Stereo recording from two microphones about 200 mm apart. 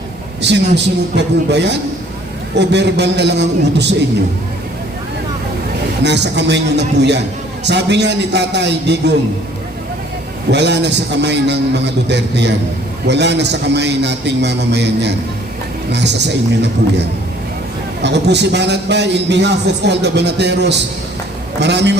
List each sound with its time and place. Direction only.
0.4 s a man's voice: 60° right (ahead or behind)
6.0 s a man's voice: 60° right (ahead or behind)
10.5 s a man's voice: 60° right (ahead or behind)
18.0 s a man's voice: 60° right (ahead or behind)